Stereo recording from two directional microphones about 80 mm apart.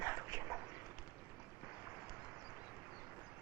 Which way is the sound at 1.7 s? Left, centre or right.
Centre.